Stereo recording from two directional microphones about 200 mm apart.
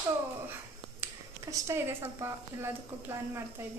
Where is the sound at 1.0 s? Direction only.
15° right (ahead or behind).